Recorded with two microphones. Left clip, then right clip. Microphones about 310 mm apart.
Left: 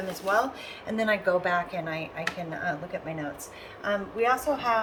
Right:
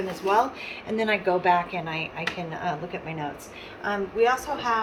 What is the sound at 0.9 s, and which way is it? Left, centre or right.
A woman's voice, centre.